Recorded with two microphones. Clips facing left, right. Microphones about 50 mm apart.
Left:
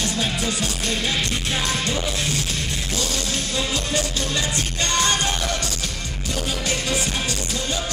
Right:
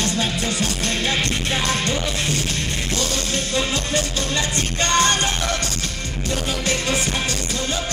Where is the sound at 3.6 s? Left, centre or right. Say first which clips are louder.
Right 2 dB; right.